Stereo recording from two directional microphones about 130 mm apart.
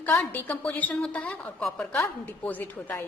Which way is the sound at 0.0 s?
15° left (ahead or behind).